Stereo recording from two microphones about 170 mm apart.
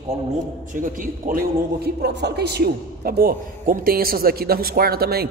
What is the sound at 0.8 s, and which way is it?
Speech, 50° right (ahead or behind).